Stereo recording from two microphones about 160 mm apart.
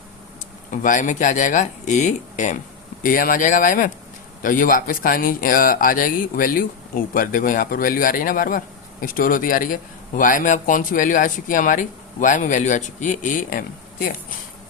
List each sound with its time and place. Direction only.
0.7 s speech: 55° left (ahead or behind)
3.0 s speech: 60° left (ahead or behind)